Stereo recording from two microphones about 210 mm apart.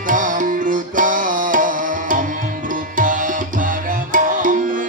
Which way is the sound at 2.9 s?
40° right (ahead or behind).